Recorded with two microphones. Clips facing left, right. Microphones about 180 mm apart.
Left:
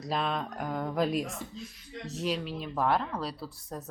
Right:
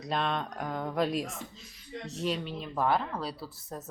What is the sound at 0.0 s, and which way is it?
Speech, centre (ahead or behind).